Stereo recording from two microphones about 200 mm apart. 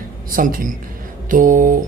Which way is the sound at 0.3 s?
45° right (ahead or behind).